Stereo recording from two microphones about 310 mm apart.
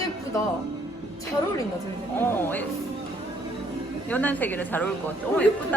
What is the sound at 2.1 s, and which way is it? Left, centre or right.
Speech, centre.